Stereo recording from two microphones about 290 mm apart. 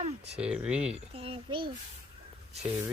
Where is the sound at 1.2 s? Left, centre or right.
Centre.